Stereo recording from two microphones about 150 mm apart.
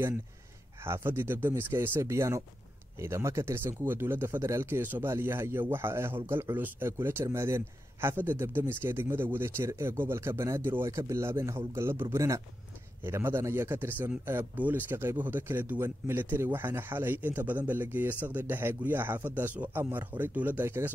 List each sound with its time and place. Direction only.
0.8 s speech: 15° right (ahead or behind)